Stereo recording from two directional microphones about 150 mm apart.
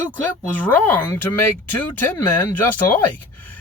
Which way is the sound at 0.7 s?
10° left (ahead or behind).